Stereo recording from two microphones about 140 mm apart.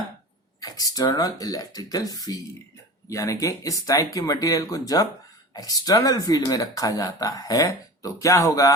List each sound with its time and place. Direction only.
0.6 s speech: 25° left (ahead or behind)